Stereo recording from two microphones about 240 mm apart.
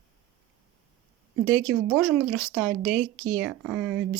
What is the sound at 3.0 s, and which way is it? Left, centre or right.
Speech, right.